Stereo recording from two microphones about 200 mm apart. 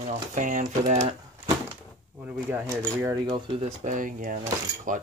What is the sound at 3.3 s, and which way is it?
Speech, 25° right (ahead or behind).